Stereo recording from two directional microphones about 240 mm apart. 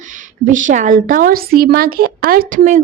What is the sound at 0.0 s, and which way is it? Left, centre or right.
Speech, right.